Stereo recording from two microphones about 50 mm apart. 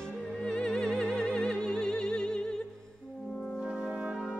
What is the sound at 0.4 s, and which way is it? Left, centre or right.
Music, centre.